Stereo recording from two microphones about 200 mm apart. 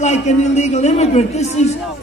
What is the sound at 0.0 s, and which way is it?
Speech, 35° left (ahead or behind).